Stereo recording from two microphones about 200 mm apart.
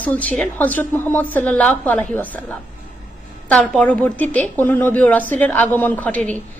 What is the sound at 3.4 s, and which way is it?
A woman's voice, 5° left (ahead or behind).